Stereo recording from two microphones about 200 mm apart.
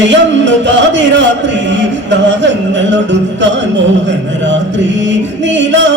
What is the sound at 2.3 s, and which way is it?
Music, 65° right (ahead or behind).